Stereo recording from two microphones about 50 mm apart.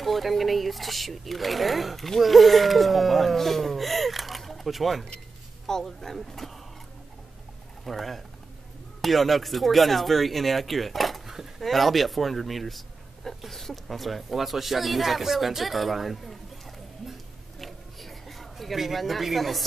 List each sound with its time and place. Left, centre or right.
0.0 s speech: centre
7.8 s speech: centre
17.6 s a sound: centre